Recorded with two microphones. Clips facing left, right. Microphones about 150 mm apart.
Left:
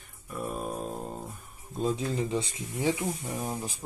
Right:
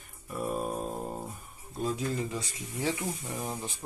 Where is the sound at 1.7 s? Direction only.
20° left (ahead or behind).